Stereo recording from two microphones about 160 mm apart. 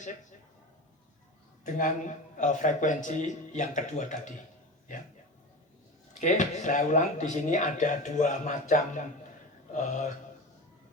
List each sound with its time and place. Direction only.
0.0 s speech: 50° left (ahead or behind)
1.6 s speech: 50° left (ahead or behind)
6.1 s speech: 50° left (ahead or behind)